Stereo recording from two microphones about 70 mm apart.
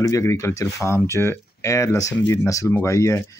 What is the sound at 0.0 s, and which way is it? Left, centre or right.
Speech, left.